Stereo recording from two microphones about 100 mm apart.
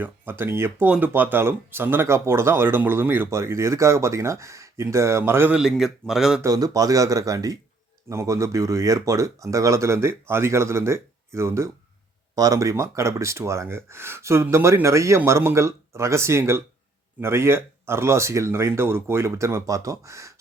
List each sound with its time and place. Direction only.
0.0 s speech: 20° right (ahead or behind)
5.5 s a man's voice: 5° right (ahead or behind)
6.4 s speech: 40° right (ahead or behind)